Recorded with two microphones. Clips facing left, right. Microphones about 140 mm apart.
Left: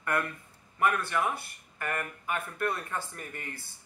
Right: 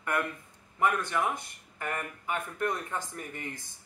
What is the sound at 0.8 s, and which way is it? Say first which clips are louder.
Speech: even; 15° right (ahead or behind).